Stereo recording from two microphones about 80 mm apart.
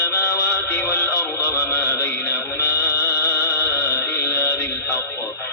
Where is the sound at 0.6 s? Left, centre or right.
Left.